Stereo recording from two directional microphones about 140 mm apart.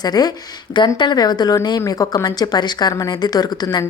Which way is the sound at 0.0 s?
30° left (ahead or behind).